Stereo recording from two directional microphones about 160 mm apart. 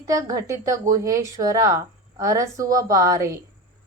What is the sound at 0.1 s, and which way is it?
A woman's voice, 20° right (ahead or behind).